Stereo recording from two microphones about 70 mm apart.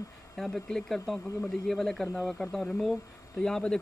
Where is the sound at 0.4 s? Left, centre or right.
Centre.